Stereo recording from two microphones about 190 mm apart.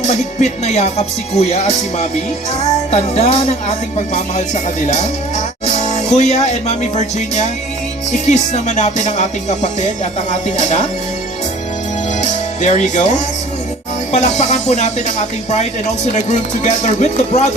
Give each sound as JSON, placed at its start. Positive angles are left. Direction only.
{"t": 0.0, "sound": "music", "side_deg": 35}
{"t": 5.6, "sound": "speech", "side_deg": 35}
{"t": 8.3, "sound": "music", "side_deg": 40}
{"t": 12.2, "sound": "speech", "side_deg": 40}
{"t": 14.1, "sound": "music", "side_deg": 35}